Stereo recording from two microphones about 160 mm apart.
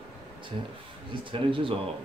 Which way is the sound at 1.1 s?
30° right (ahead or behind).